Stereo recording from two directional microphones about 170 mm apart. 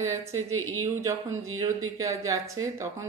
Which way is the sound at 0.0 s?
15° right (ahead or behind).